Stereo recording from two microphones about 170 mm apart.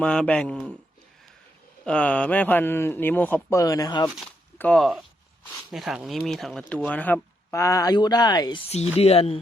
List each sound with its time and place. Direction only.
0.0 s speech: 5° left (ahead or behind)
1.8 s speech: 5° left (ahead or behind); by 4.1 s 20° left (ahead or behind)
4.3 s speech: 10° left (ahead or behind); by 8.6 s 25° left (ahead or behind)
8.7 s speech: 40° left (ahead or behind)